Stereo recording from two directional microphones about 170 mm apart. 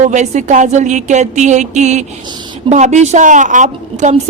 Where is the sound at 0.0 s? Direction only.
45° right (ahead or behind).